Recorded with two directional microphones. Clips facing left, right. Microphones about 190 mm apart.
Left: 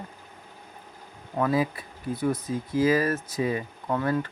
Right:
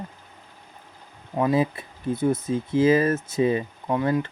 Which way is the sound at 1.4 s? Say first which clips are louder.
Right 3 dB; 20° right (ahead or behind).